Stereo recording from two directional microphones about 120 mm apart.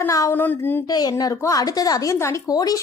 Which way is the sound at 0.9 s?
35° left (ahead or behind).